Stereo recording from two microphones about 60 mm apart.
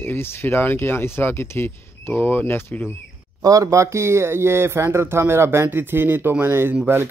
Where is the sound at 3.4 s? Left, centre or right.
Right.